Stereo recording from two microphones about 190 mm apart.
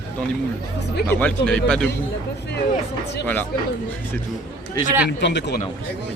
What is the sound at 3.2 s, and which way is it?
Speech, 10° left (ahead or behind).